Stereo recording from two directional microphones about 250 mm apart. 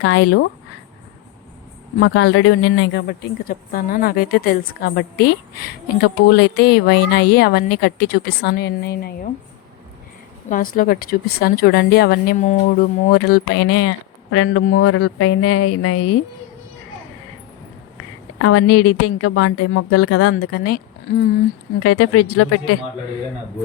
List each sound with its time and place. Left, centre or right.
0.0 s a woman's voice: left
2.0 s speech: left
10.5 s speech: left
13.6 s a woman's voice: left
18.3 s a woman's voice: left
20.4 s speech: left
21.8 s a woman's voice: left